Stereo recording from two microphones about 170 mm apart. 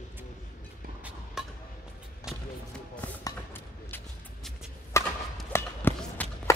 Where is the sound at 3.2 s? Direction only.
15° left (ahead or behind).